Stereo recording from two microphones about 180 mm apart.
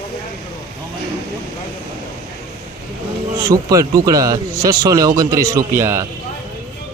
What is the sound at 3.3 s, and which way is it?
Speech, 20° right (ahead or behind).